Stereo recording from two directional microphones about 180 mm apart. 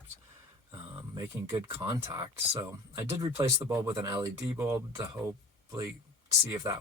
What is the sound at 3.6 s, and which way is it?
Speech, 15° right (ahead or behind).